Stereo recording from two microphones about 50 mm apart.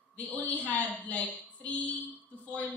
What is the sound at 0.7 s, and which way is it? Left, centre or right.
Speech, left.